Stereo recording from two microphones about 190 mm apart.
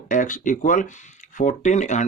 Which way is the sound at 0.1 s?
45° left (ahead or behind).